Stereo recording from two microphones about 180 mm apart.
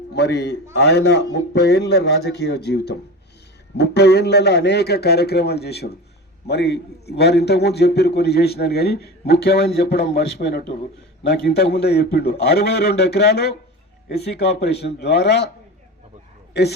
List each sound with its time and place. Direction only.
0.1 s a man's voice: 70° left (ahead or behind)